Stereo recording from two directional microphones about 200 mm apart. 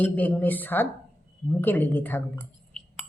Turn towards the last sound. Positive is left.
turn(degrees=5)  # may be behind; listen again after turning